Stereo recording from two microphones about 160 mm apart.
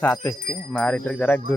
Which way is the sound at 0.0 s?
10° left (ahead or behind).